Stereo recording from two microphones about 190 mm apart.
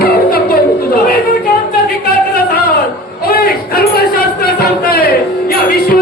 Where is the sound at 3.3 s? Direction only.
55° left (ahead or behind).